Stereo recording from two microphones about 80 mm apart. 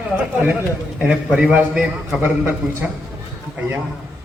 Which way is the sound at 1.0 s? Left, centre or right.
Centre.